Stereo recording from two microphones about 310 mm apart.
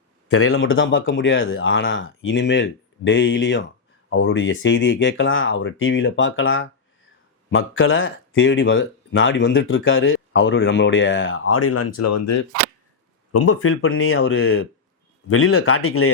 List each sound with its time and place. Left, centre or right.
0.3 s speech: left
11.9 s speech: left
13.3 s speech: left